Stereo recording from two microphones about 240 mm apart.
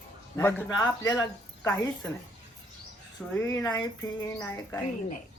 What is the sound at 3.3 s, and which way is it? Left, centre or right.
Speech, centre.